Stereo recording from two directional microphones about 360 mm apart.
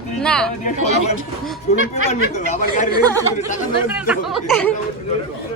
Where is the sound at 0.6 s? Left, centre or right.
Centre.